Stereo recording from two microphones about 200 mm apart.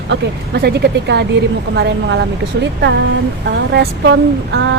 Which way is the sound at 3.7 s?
55° right (ahead or behind).